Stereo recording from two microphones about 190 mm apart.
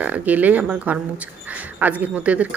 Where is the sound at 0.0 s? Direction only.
10° right (ahead or behind).